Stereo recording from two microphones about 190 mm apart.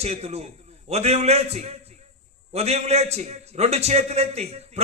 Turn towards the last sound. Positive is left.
turn(degrees=-35)  # may be behind; listen again after turning